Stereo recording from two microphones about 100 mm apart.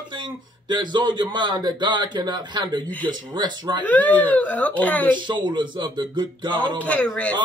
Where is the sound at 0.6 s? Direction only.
50° right (ahead or behind).